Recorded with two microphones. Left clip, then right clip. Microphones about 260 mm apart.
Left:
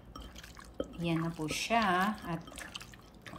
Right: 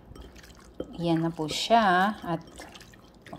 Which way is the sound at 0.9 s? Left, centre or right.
Right.